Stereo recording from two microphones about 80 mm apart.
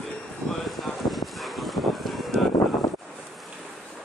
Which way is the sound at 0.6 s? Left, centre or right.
Centre.